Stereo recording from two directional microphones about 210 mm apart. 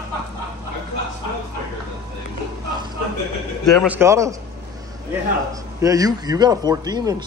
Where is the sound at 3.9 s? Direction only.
15° right (ahead or behind).